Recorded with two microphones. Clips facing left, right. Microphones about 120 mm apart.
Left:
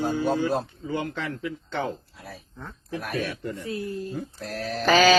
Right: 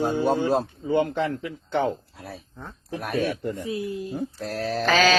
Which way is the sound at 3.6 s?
15° right (ahead or behind).